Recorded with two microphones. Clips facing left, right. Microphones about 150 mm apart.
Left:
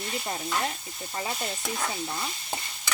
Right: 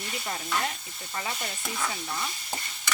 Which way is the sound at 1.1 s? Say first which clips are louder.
Left 2 dB; 25° left (ahead or behind).